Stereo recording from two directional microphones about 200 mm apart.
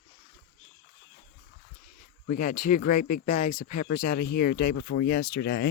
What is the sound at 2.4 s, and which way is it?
Speech, 45° left (ahead or behind).